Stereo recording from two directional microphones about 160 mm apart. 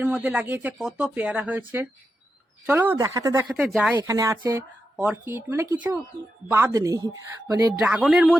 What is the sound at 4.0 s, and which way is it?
Speech, 20° right (ahead or behind).